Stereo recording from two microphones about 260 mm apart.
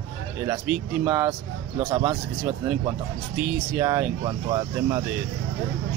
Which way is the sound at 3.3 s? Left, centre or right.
Centre.